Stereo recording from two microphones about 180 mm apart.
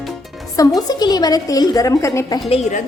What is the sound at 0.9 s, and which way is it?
A woman's voice, 20° left (ahead or behind).